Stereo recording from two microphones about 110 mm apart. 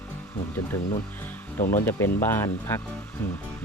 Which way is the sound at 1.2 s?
20° left (ahead or behind).